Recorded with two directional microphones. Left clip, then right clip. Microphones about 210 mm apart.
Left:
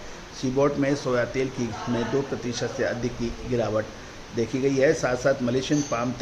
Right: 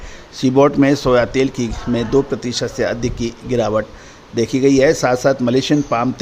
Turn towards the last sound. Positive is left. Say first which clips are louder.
# right 9 dB
turn(degrees=-50)  # may be behind; listen again after turning